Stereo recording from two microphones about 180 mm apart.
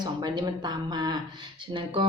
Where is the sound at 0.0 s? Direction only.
25° right (ahead or behind).